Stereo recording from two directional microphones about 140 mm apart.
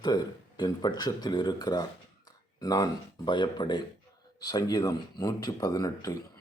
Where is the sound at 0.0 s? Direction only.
30° left (ahead or behind).